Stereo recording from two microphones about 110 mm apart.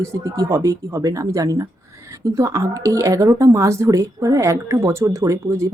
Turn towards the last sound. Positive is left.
turn(degrees=-25)  # may be behind; listen again after turning